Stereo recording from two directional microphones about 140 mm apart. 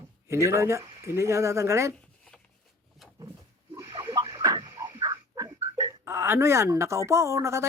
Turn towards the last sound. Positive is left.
turn(degrees=-20)  # may be behind; listen again after turning